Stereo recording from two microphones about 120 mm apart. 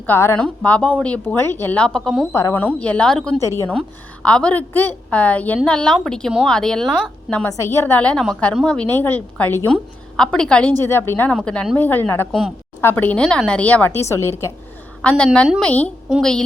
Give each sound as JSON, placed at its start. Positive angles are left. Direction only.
{"t": 0.0, "sound": "a woman's voice", "side_deg": 20}
{"t": 2.3, "sound": "a woman's voice", "side_deg": 25}
{"t": 2.6, "sound": "a woman's voice", "side_deg": 10}
{"t": 3.4, "sound": "a woman's voice", "side_deg": 25}
{"t": 3.7, "sound": "a woman's voice", "side_deg": 10}
{"t": 7.4, "sound": "a woman's voice", "side_deg": 25}
{"t": 11.3, "sound": "a woman's voice", "side_deg": 5}
{"t": 12.3, "sound": "a woman's voice", "side_deg": 0}
{"t": 12.8, "sound": "a woman's voice", "side_deg": 15}
{"t": 15.2, "sound": "a woman's voice", "side_deg": 5}